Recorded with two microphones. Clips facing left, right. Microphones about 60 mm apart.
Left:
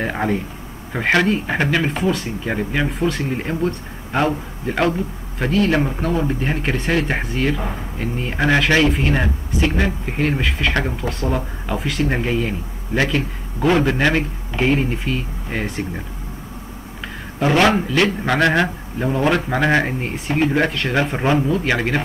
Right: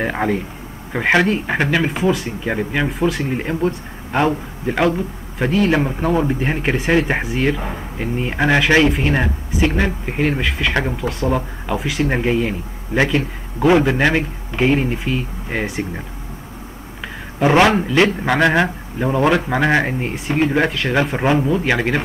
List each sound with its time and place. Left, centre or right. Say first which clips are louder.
0.0 s a man's voice: right 1 dB; centre
13.1 s speech: right 2 dB; centre
17.4 s a man's voice: right 2 dB; centre